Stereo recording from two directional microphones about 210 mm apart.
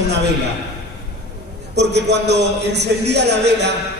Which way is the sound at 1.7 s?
55° right (ahead or behind).